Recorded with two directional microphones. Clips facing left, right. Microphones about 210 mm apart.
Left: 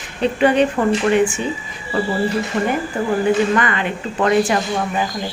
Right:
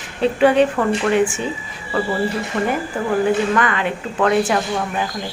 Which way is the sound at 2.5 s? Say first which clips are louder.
Even; 15° left (ahead or behind).